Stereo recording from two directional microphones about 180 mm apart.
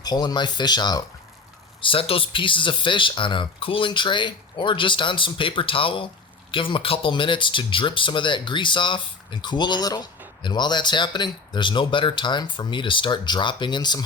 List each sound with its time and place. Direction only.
0.0 s speech: 20° left (ahead or behind)